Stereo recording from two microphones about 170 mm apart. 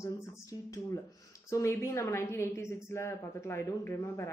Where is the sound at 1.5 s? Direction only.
15° left (ahead or behind).